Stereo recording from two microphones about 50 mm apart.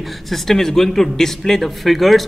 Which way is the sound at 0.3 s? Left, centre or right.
Centre.